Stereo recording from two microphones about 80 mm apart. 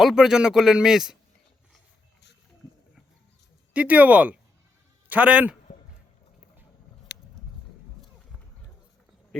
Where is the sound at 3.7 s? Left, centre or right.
Centre.